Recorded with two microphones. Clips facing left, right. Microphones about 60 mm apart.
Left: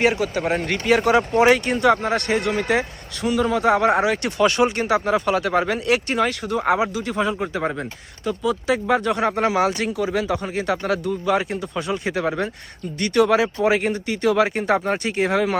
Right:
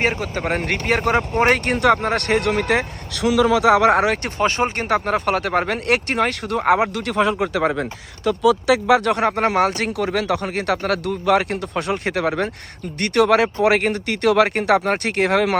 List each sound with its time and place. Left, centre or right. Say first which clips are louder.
0.0 s speech: left 2 dB; right
4.2 s speech: left 2 dB; right
5.0 s speech: even; right